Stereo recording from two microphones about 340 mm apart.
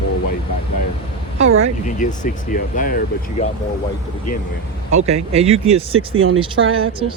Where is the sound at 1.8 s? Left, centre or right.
Left.